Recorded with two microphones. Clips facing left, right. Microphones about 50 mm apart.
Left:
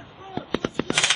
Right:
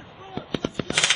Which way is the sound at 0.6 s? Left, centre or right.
Left.